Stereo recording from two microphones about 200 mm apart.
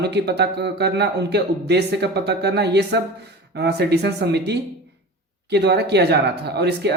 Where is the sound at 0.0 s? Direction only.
55° right (ahead or behind).